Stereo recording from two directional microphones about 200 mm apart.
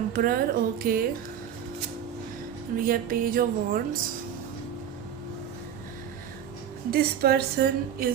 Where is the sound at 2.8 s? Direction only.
45° right (ahead or behind).